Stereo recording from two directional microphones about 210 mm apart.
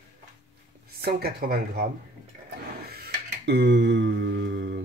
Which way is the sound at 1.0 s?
45° right (ahead or behind).